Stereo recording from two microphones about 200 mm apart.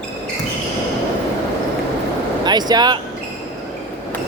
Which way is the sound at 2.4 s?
20° right (ahead or behind).